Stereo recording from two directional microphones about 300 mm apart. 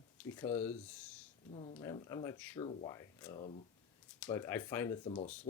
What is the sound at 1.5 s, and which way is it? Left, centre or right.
Speech, centre.